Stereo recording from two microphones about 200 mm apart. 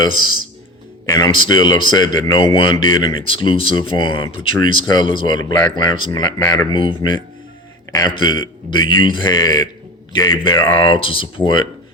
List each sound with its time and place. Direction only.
1.0 s speech: 20° left (ahead or behind)